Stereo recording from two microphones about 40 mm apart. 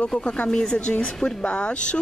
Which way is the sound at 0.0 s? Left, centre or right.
Left.